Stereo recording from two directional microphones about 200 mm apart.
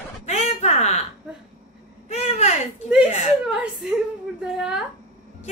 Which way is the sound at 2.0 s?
30° left (ahead or behind).